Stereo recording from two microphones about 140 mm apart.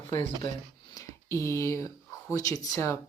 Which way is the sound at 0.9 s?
20° left (ahead or behind).